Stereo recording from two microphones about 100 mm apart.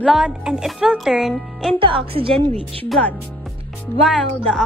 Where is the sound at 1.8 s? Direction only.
65° right (ahead or behind).